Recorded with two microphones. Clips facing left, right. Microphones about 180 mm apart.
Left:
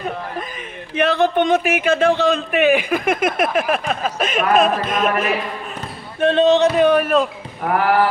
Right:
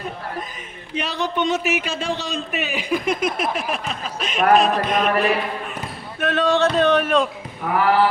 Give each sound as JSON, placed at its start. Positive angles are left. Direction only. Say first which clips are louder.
{"t": 0.9, "sound": "speech", "louder": "left 8 dB", "side_deg": 55}
{"t": 6.1, "sound": "speech", "louder": "left 5 dB", "side_deg": 25}
{"t": 6.7, "sound": "speech", "louder": "left 3 dB", "side_deg": 10}